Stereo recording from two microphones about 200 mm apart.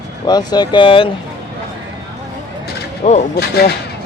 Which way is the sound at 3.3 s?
50° left (ahead or behind).